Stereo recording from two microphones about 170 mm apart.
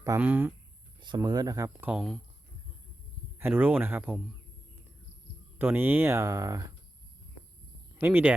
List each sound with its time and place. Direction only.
0.0 s speech: 15° right (ahead or behind)
0.9 s speech: 25° right (ahead or behind)
1.9 s speech: centre (ahead or behind)
3.3 s speech: 15° right (ahead or behind)
5.5 s speech: 10° right (ahead or behind)
7.9 s speech: 10° right (ahead or behind)